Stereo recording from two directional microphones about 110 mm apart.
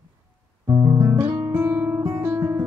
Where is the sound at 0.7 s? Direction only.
35° right (ahead or behind).